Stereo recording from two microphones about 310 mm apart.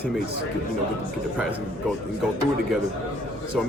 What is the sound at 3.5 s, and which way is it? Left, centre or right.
Speech, centre.